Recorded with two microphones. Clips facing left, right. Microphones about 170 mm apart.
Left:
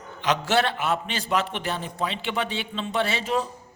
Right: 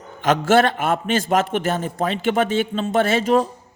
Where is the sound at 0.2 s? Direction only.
50° right (ahead or behind).